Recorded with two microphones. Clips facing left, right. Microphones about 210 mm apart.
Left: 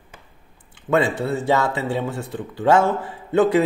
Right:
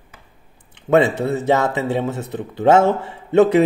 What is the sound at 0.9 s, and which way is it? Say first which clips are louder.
Speech: right 4 dB; 20° right (ahead or behind).